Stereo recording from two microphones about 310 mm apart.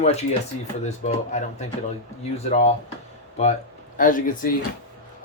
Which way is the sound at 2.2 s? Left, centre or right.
Left.